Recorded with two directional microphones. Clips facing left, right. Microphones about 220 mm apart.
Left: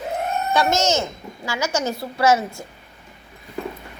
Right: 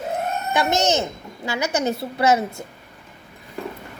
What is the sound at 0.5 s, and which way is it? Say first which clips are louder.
A woman's voice: even; 20° right (ahead or behind).